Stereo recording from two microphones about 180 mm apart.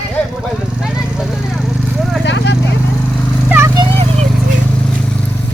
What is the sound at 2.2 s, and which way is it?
Horse, 80° left.